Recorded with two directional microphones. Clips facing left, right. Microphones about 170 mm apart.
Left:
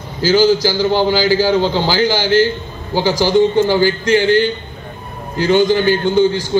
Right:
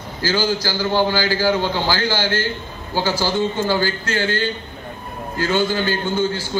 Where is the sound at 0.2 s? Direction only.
15° left (ahead or behind).